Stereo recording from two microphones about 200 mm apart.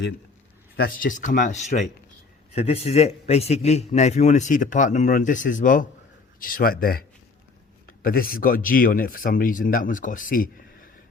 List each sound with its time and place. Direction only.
0.8 s a man's voice: 45° left (ahead or behind)
8.0 s speech: 45° left (ahead or behind)